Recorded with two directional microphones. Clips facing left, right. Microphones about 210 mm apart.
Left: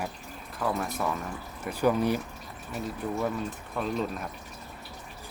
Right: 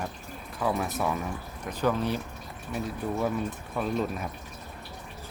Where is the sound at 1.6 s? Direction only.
10° left (ahead or behind).